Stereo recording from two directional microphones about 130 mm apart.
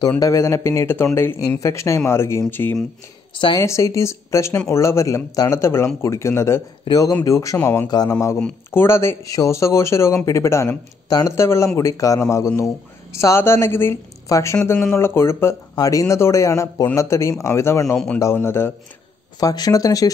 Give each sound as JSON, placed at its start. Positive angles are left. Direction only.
{"t": 0.2, "sound": "speech", "side_deg": 20}
{"t": 17.9, "sound": "speech", "side_deg": 10}
{"t": 18.2, "sound": "speech", "side_deg": 20}